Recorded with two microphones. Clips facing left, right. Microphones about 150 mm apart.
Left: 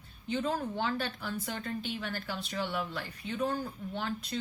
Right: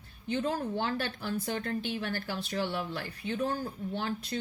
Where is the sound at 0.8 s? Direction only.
50° right (ahead or behind).